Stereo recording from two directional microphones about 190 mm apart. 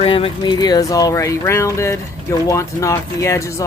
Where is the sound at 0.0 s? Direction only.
30° left (ahead or behind).